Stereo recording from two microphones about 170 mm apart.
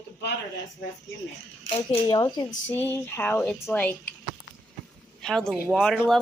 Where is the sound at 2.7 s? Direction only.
15° left (ahead or behind).